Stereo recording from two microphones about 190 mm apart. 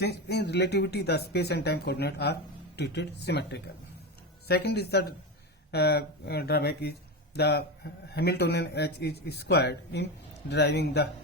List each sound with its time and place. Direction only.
0.0 s speech: 60° left (ahead or behind)